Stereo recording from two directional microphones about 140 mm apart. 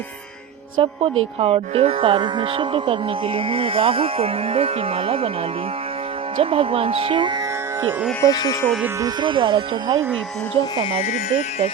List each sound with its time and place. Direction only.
0.8 s speech: 40° right (ahead or behind)
6.3 s speech: 40° right (ahead or behind)
8.2 s speech: 25° left (ahead or behind)
9.0 s speech: 30° right (ahead or behind)
10.9 s speech: 50° left (ahead or behind)